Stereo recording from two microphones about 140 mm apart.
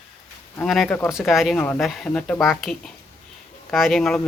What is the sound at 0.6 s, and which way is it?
Speech, centre (ahead or behind).